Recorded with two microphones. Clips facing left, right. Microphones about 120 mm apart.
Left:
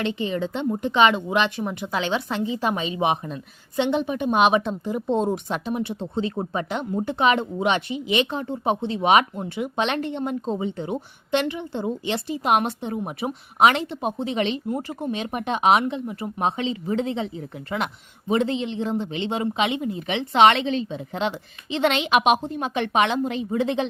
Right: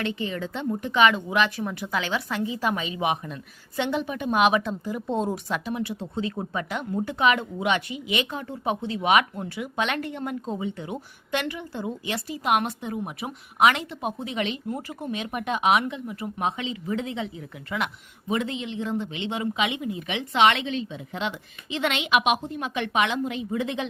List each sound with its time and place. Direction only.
0.0 s a woman's voice: 20° left (ahead or behind)